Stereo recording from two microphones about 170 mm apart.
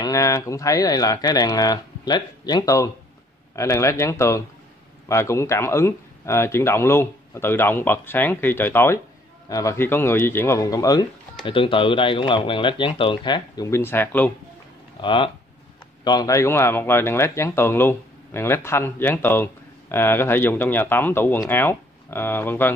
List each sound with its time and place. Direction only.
0.0 s speech: 20° left (ahead or behind)
13.7 s speech: 15° left (ahead or behind)
15.0 s speech: 30° left (ahead or behind); by 22.7 s 15° left (ahead or behind)